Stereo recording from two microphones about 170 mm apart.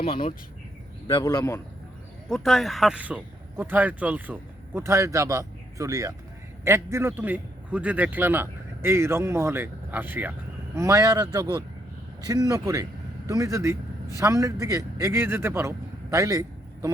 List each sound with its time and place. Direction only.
0.0 s speech: 35° left (ahead or behind)
1.0 s speech: 20° left (ahead or behind)
2.3 s a man's voice: centre (ahead or behind); by 16.9 s 20° right (ahead or behind)